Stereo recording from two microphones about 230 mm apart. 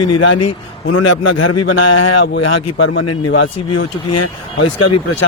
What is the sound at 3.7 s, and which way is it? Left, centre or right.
Speech, left.